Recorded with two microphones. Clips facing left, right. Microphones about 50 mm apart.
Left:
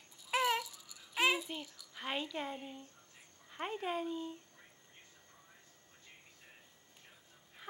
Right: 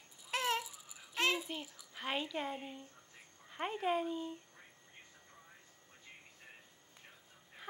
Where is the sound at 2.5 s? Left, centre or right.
Centre.